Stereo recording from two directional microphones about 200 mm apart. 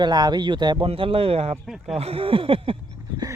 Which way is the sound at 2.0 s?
30° right (ahead or behind).